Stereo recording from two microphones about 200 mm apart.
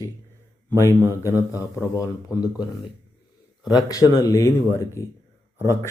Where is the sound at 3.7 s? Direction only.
20° left (ahead or behind).